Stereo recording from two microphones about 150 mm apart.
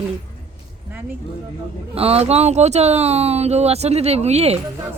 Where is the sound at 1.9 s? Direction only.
40° right (ahead or behind).